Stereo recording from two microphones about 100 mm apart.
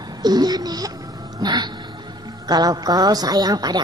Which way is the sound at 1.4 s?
45° right (ahead or behind).